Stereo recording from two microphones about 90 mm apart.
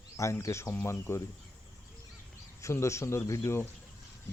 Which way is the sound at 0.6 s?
20° left (ahead or behind).